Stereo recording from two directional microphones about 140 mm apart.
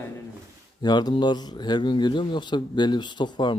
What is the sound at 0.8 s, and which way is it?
Speech, 30° left (ahead or behind).